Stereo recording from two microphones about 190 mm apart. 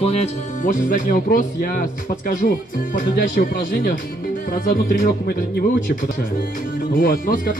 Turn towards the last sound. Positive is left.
turn(degrees=45)  # may be behind; listen again after turning